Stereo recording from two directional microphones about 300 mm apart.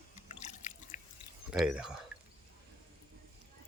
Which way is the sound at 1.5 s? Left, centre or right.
Centre.